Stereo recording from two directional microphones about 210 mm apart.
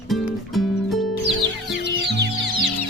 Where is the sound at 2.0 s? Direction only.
50° right (ahead or behind).